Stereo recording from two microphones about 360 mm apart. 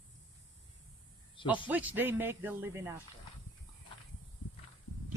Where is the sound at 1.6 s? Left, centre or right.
Centre.